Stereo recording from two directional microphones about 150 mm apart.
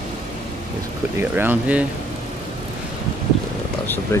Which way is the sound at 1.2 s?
15° right (ahead or behind).